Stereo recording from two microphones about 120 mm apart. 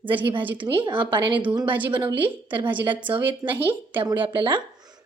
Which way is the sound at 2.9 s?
15° right (ahead or behind).